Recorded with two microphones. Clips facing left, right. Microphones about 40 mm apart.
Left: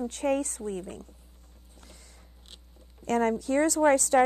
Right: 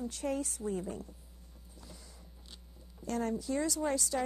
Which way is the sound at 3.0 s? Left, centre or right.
Left.